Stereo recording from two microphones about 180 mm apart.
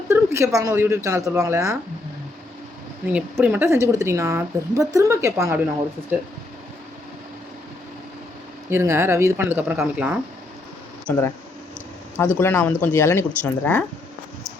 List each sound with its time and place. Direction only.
0.1 s speech: 15° right (ahead or behind)
3.1 s speech: 5° right (ahead or behind)
8.7 s speech: 15° right (ahead or behind)
11.1 s speech: 10° left (ahead or behind)